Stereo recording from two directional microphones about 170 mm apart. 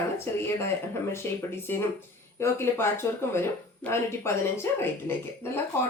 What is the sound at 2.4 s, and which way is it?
Speech, 15° left (ahead or behind).